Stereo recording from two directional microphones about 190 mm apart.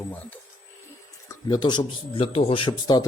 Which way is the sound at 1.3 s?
20° left (ahead or behind).